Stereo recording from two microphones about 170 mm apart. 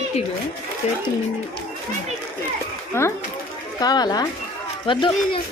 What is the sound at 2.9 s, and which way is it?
Speech, 15° left (ahead or behind).